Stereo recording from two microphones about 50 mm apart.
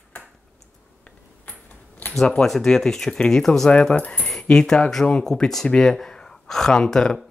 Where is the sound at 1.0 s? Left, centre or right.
Left.